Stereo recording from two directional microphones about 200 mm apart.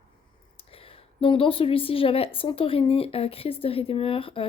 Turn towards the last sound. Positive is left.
turn(degrees=25)  # may be behind; listen again after turning